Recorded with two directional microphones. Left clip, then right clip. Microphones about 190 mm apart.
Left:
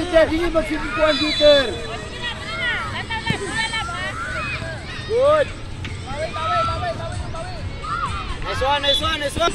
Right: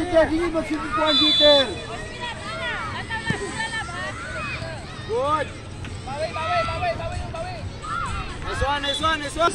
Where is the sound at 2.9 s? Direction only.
60° right (ahead or behind).